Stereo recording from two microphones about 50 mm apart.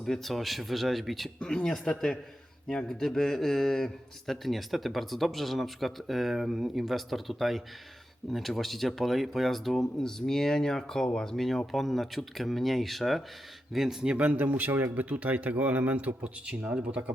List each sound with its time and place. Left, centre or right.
0.0 s speech: centre
1.4 s a man's voice: centre
14.2 s speech: right
14.4 s a man's voice: right